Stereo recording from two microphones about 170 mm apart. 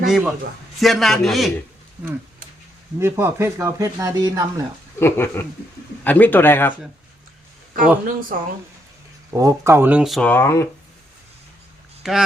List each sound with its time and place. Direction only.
0.0 s a man's voice: 5° right (ahead or behind)
3.0 s speech: 15° right (ahead or behind)
4.9 s speech: 15° left (ahead or behind)
7.8 s a man's voice: 55° right (ahead or behind)
9.3 s speech: 20° right (ahead or behind); by 10.2 s centre (ahead or behind)
10.2 s speech: 15° left (ahead or behind)
12.0 s a man's voice: 5° right (ahead or behind)